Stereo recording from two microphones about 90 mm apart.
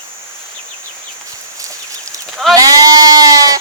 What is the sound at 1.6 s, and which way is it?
Chicken, 40° right (ahead or behind).